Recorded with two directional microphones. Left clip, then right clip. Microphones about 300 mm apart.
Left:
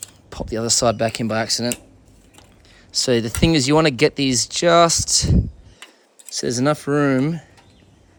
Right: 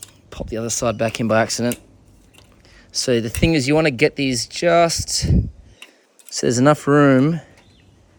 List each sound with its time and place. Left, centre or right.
0.0 s a sound: centre
0.5 s speech: centre
4.9 s speech: left
6.3 s speech: centre